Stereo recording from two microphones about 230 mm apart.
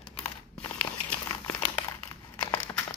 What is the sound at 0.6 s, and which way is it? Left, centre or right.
Crumpling, centre.